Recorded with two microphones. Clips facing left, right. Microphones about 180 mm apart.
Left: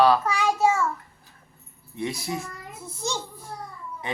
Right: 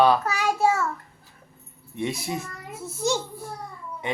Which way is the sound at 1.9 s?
20° right (ahead or behind).